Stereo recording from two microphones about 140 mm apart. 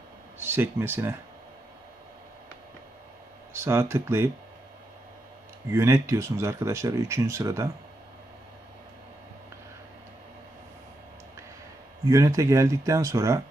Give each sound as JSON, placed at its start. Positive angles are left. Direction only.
{"t": 0.3, "sound": "speech", "side_deg": -15}
{"t": 3.5, "sound": "speech", "side_deg": -20}
{"t": 5.7, "sound": "speech", "side_deg": -20}
{"t": 12.0, "sound": "speech", "side_deg": -25}